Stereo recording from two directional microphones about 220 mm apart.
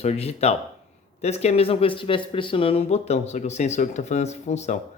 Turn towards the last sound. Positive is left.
turn(degrees=30)  # may be behind; listen again after turning